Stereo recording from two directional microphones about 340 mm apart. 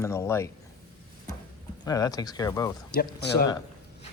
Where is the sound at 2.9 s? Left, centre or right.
Left.